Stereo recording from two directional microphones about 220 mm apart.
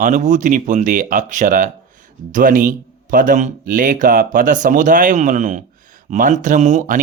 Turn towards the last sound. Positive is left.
turn(degrees=-35)  # may be behind; listen again after turning